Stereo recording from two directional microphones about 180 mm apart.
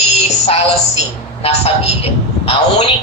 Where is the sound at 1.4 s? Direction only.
35° left (ahead or behind).